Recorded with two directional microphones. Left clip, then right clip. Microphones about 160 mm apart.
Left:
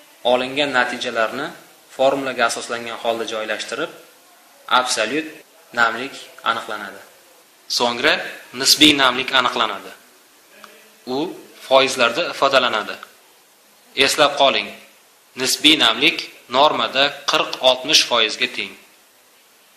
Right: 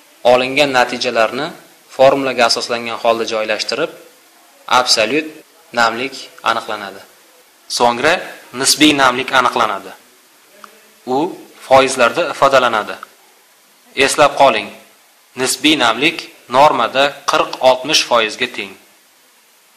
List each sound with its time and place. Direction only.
0.2 s a man's voice: 45° right (ahead or behind)
7.7 s a man's voice: 30° right (ahead or behind)
11.1 s a man's voice: 30° right (ahead or behind)